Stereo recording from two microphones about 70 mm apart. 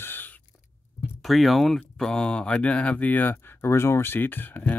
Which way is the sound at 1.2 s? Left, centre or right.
Centre.